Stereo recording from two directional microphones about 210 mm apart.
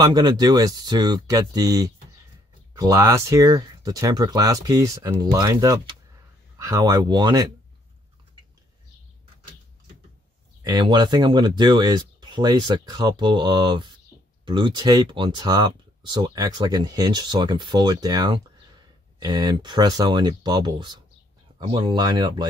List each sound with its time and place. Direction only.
0.0 s speech: 20° right (ahead or behind)
10.6 s speech: 20° right (ahead or behind)